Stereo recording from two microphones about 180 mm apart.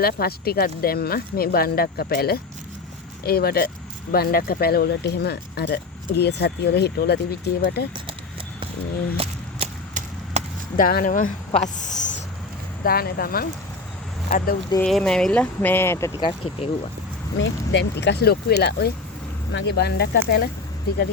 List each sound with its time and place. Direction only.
0.0 s speech: 60° left (ahead or behind)
9.1 s a sound: 35° right (ahead or behind)
10.8 s speech: 50° left (ahead or behind)
12.8 s speech: 55° left (ahead or behind)
14.8 s speech: 5° left (ahead or behind); by 16.3 s 20° left (ahead or behind)
17.3 s speech: 90° left; by 20.5 s 60° left (ahead or behind)